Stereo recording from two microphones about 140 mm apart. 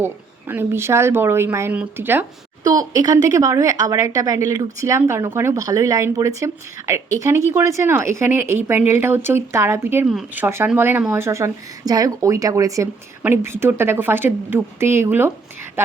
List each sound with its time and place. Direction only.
0.0 s speech: 15° right (ahead or behind)
2.6 s a woman's voice: 25° right (ahead or behind)